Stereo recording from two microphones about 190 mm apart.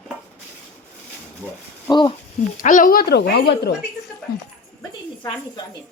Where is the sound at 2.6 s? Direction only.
45° left (ahead or behind); by 3.7 s 60° left (ahead or behind).